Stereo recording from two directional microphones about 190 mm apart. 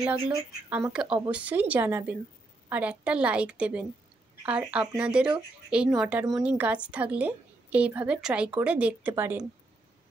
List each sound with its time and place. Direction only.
0.3 s speech: 10° right (ahead or behind)